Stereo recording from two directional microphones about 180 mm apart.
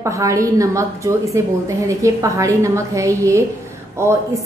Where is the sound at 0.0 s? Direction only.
15° right (ahead or behind).